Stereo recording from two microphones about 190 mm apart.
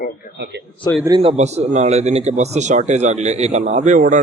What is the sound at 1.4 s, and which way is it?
Speech, 35° right (ahead or behind).